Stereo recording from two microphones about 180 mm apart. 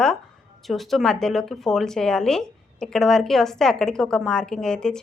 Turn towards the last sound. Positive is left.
turn(degrees=5)  # may be behind; listen again after turning